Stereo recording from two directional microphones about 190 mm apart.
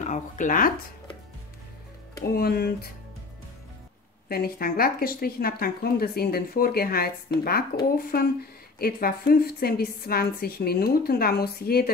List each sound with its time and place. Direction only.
0.0 s speech: 40° left (ahead or behind)
2.2 s speech: 55° left (ahead or behind)
4.3 s speech: 50° left (ahead or behind)